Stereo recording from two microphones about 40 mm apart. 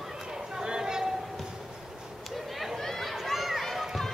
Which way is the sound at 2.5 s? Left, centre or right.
Centre.